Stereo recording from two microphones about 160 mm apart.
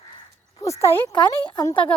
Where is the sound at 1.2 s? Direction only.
30° left (ahead or behind).